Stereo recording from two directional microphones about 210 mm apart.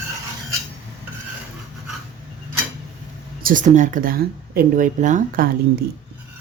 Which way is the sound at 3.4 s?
40° right (ahead or behind).